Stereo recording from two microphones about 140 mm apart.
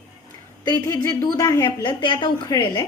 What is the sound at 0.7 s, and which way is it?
A woman's voice, 20° left (ahead or behind).